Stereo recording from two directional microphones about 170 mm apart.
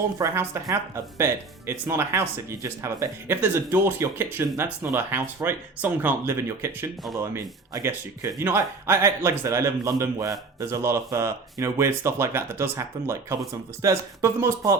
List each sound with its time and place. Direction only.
0.2 s speech: 15° right (ahead or behind)